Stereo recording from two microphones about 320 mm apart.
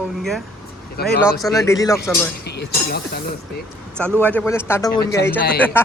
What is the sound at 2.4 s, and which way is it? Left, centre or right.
Speech, left.